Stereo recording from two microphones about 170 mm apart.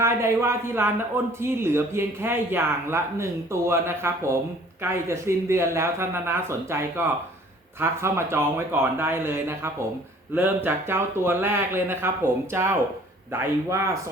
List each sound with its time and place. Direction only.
0.0 s speech: 15° right (ahead or behind)